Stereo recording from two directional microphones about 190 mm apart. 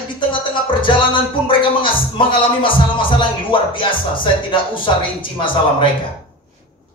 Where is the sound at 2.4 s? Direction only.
25° left (ahead or behind).